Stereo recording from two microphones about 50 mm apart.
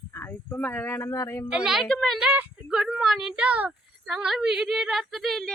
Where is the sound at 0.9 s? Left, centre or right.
Left.